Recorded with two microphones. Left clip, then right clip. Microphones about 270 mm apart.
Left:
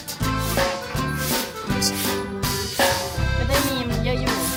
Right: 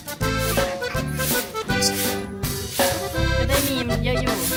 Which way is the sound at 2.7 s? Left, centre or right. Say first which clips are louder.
Even; centre.